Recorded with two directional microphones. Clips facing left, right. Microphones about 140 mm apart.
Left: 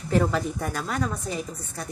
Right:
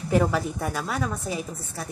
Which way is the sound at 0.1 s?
5° right (ahead or behind).